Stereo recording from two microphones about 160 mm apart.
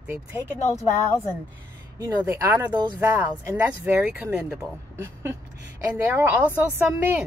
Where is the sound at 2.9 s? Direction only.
10° right (ahead or behind).